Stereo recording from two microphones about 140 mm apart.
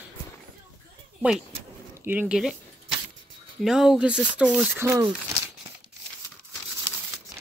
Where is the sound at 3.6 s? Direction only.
5° right (ahead or behind).